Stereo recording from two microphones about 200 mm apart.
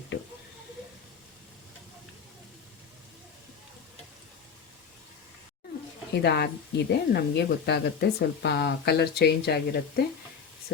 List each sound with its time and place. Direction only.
6.2 s speech: 55° left (ahead or behind)